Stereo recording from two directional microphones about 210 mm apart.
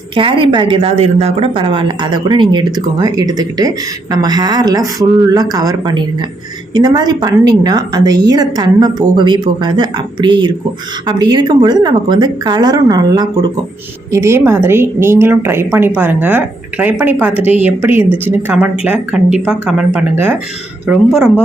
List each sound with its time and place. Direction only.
0.1 s a woman's voice: 25° right (ahead or behind); by 21.2 s 5° right (ahead or behind)